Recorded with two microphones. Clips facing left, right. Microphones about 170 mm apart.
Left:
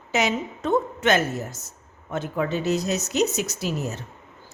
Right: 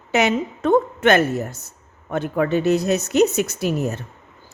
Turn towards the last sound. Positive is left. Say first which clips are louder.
# right 6 dB
turn(degrees=-55)  # may be behind; listen again after turning